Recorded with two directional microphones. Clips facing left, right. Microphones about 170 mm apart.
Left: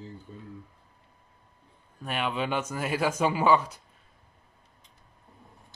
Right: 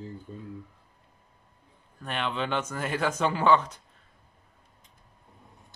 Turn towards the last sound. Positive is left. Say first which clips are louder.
# even
turn(degrees=10)  # may be behind; listen again after turning